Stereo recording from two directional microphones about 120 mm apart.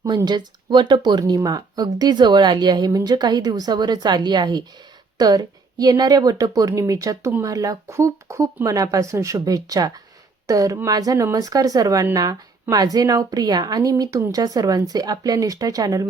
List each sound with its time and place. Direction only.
0.3 s a woman's voice: 40° right (ahead or behind)